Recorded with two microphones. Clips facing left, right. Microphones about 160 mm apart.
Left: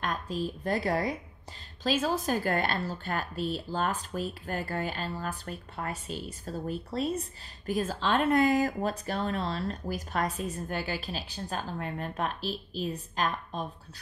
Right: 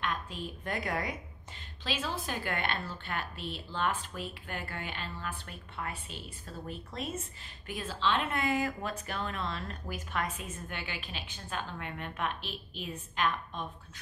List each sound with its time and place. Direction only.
0.0 s a woman's voice: 40° left (ahead or behind)